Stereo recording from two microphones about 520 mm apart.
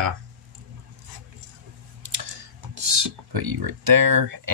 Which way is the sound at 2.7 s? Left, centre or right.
Right.